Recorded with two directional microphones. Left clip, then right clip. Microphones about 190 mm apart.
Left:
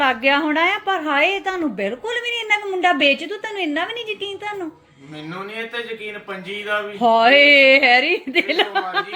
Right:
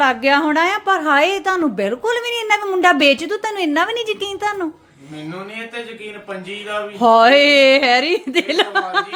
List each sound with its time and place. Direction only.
0.0 s a woman's voice: 15° right (ahead or behind); by 4.5 s 35° right (ahead or behind)
6.7 s a woman's voice: 20° right (ahead or behind)